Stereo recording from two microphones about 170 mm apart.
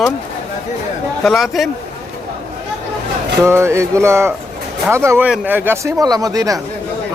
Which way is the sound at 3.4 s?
15° right (ahead or behind).